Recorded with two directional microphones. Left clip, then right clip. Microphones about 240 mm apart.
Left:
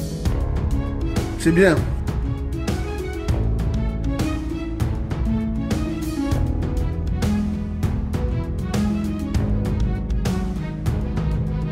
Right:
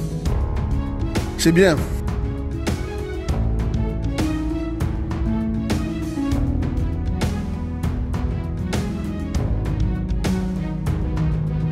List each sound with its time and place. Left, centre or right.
1.4 s speech: right